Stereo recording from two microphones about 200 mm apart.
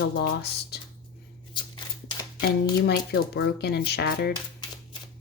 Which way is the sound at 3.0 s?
55° left (ahead or behind).